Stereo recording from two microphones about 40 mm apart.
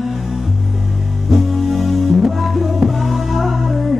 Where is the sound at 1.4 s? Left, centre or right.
Centre.